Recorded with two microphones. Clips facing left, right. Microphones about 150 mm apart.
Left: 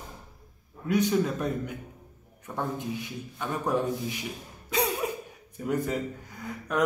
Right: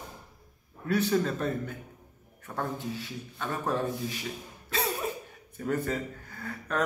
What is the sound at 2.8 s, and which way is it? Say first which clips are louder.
A man's voice: left 2 dB; 15° left (ahead or behind).